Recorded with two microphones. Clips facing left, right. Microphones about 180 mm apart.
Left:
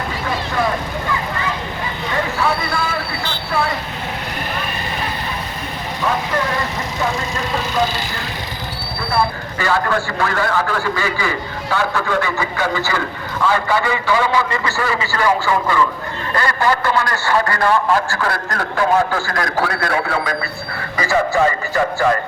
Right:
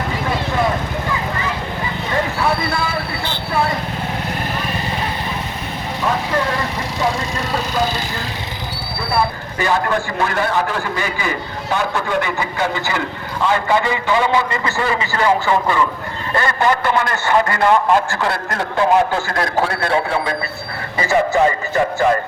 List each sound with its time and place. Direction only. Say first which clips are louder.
9.6 s a man's voice: right 1 dB; 20° right (ahead or behind)